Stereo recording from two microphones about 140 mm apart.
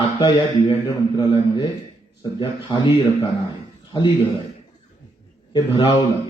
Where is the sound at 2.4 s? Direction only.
35° left (ahead or behind).